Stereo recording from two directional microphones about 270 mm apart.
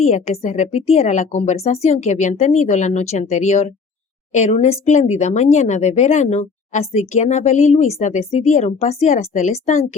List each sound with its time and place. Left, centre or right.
0.0 s speech: left